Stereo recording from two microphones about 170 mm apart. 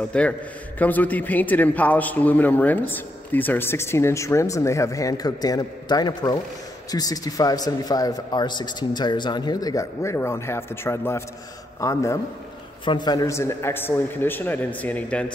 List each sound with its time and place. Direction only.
0.1 s a man's voice: 5° left (ahead or behind)